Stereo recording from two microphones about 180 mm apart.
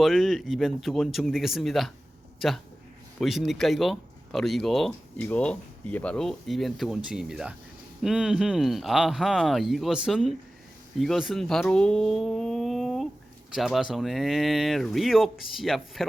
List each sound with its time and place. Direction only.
0.0 s speech: centre (ahead or behind)
3.2 s speech: centre (ahead or behind)